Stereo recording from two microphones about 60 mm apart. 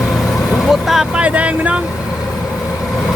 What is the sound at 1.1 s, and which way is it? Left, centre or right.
Speech, right.